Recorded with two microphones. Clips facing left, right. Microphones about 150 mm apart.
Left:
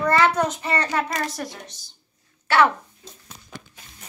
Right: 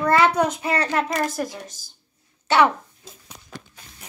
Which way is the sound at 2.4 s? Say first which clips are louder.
Right 1 dB; 20° right (ahead or behind).